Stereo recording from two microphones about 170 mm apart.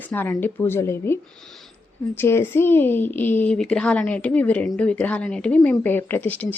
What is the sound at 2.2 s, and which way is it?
Speech, 15° left (ahead or behind).